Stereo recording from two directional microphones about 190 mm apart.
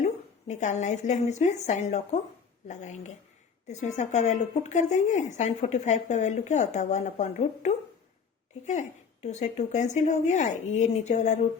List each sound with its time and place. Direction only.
0.0 s a woman's voice: 40° left (ahead or behind)